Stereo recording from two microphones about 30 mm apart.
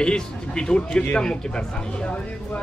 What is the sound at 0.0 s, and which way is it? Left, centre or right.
Speech, left.